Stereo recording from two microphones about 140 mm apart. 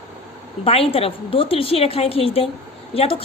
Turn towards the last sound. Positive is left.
turn(degrees=45)  # may be behind; listen again after turning